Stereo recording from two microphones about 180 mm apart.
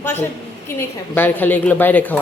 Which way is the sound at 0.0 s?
10° left (ahead or behind).